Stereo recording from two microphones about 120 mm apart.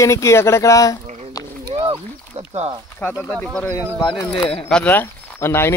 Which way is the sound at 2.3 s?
55° right (ahead or behind).